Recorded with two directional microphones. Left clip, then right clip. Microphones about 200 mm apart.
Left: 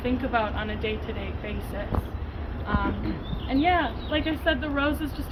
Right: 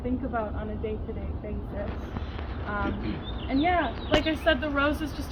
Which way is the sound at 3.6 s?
5° right (ahead or behind).